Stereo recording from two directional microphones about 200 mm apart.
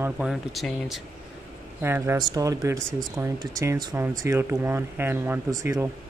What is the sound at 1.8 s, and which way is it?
Speech, 10° right (ahead or behind).